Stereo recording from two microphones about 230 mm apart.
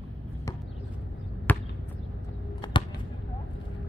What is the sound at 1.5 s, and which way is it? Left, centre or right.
Chop, centre.